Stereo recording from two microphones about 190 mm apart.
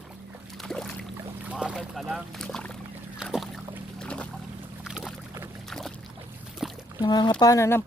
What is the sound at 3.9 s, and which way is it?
Music, 5° left (ahead or behind).